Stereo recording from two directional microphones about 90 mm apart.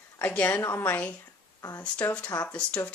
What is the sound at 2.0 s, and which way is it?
Speech, 15° left (ahead or behind).